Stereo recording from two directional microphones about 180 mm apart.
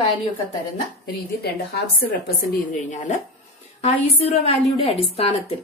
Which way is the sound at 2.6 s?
45° left (ahead or behind).